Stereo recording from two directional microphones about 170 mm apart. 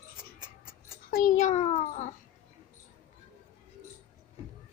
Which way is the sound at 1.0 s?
55° left (ahead or behind).